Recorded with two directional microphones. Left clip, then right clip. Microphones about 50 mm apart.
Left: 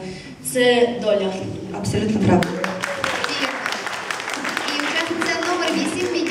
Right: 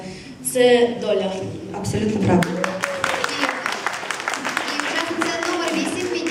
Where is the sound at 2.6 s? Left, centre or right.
Right.